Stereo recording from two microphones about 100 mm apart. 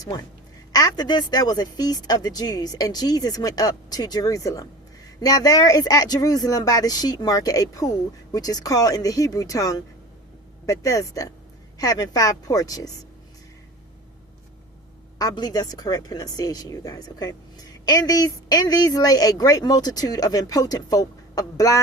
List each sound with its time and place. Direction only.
0.7 s a woman's voice: 40° left (ahead or behind)
15.2 s a woman's voice: 40° left (ahead or behind)